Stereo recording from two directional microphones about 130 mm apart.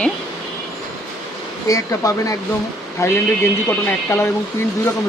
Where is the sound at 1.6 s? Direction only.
25° left (ahead or behind).